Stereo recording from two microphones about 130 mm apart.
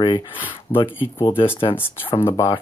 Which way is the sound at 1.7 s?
20° left (ahead or behind).